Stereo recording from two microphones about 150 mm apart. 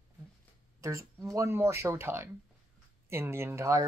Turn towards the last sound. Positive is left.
turn(degrees=-20)  # may be behind; listen again after turning